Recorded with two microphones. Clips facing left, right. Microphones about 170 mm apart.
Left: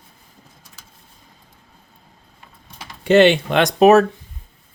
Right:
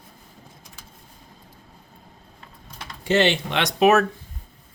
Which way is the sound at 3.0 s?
60° left (ahead or behind).